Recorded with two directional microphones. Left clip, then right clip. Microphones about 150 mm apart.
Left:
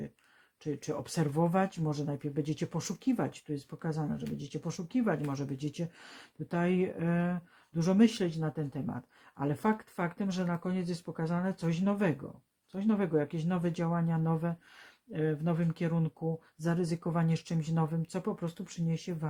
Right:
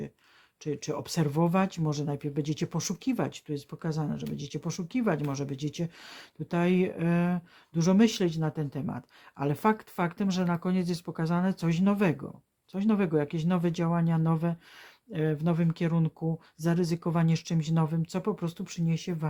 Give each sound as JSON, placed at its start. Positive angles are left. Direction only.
{"t": 0.6, "sound": "speech", "side_deg": -30}